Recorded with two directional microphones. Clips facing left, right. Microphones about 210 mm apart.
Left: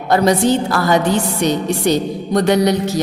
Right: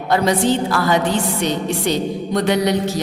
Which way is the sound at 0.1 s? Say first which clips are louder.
Left 3 dB; 40° left (ahead or behind).